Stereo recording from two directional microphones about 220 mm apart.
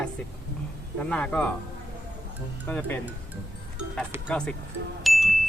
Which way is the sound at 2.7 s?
10° left (ahead or behind).